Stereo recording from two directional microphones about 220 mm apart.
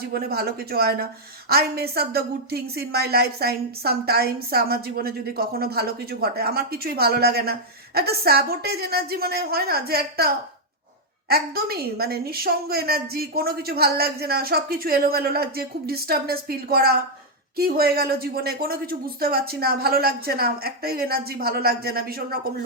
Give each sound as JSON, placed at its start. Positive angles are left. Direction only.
{"t": 0.1, "sound": "a woman's voice", "side_deg": -45}